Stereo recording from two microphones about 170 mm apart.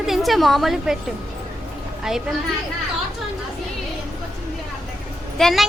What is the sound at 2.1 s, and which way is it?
Speech, centre (ahead or behind).